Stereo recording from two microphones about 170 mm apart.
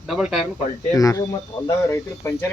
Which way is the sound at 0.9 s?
20° left (ahead or behind).